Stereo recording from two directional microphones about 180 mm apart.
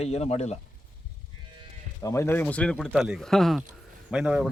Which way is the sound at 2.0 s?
15° left (ahead or behind).